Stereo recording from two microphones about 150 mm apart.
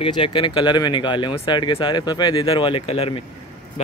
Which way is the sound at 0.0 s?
35° left (ahead or behind).